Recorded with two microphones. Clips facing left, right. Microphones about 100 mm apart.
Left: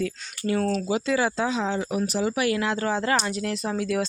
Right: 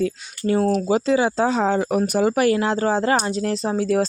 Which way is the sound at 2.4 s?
30° right (ahead or behind).